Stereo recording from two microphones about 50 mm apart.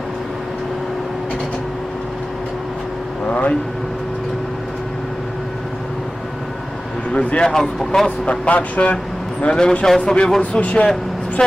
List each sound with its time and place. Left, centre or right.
3.2 s vehicle: left
7.1 s speech: left
7.5 s speech: centre
8.0 s speech: left
9.4 s speech: centre
10.6 s speech: left